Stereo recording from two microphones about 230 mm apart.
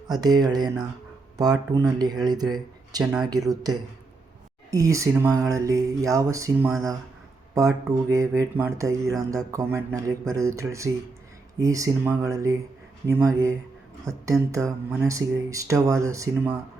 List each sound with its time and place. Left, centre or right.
0.1 s speech: centre